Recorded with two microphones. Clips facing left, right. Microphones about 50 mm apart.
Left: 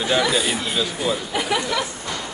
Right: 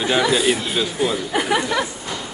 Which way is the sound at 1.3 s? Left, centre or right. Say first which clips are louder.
Right 3 dB; right.